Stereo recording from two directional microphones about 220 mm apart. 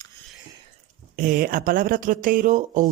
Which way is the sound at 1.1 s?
35° right (ahead or behind).